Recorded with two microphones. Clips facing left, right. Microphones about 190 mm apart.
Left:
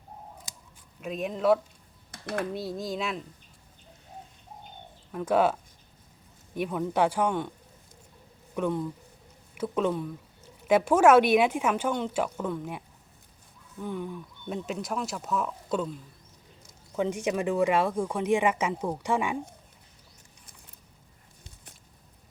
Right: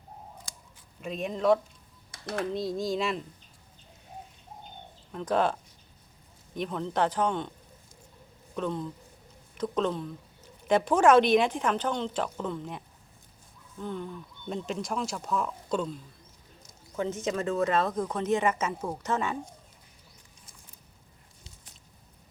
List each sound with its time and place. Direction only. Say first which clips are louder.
1.0 s speech: left 1 dB; centre (ahead or behind)
2.1 s computer keyboard: left 2 dB; 55° left (ahead or behind)
2.4 s speech: right 4 dB; 5° left (ahead or behind)
5.1 s speech: left 3 dB; 5° left (ahead or behind)
8.5 s speech: left 3 dB; 10° left (ahead or behind)
16.9 s speech: left 2 dB; 15° left (ahead or behind)